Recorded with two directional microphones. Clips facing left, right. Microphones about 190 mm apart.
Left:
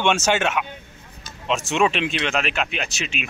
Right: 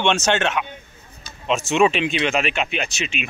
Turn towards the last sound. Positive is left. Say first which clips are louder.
# right 2 dB
turn(degrees=0)  # may be behind; listen again after turning